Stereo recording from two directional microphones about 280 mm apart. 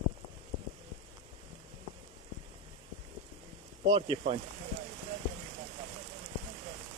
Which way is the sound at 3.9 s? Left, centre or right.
Centre.